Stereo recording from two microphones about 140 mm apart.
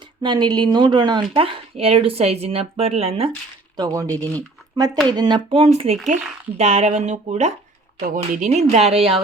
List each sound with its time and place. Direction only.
0.2 s speech: 30° right (ahead or behind)
3.8 s speech: 25° right (ahead or behind)
4.1 s speech: 10° left (ahead or behind)
5.0 s speech: 30° right (ahead or behind)
5.5 s speech: 45° right (ahead or behind)
8.0 s speech: 70° right (ahead or behind); by 9.2 s 45° right (ahead or behind)